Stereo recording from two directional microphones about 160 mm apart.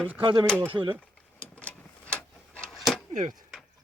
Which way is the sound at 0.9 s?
5° left (ahead or behind).